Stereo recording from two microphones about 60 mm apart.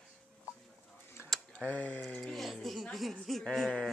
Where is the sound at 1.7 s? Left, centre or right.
Left.